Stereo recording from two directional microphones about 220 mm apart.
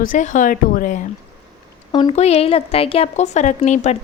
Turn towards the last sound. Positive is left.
turn(degrees=30)  # may be behind; listen again after turning